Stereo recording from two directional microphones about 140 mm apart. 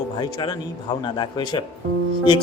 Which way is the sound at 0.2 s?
35° left (ahead or behind).